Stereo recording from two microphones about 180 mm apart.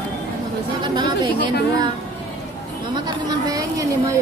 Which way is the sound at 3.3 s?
20° right (ahead or behind).